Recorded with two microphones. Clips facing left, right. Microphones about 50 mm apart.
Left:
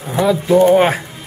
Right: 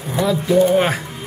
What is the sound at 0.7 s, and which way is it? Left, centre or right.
Speech, centre.